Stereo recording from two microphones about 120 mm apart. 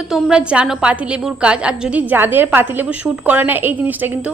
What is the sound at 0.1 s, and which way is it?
A woman's voice, 5° right (ahead or behind).